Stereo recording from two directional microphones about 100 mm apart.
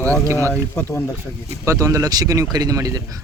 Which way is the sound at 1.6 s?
30° right (ahead or behind).